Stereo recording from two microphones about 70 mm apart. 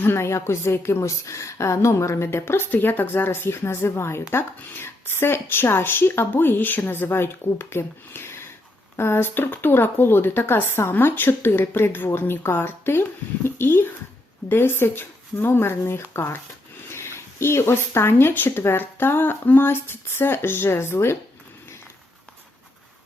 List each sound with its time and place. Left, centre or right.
0.0 s a woman's voice: left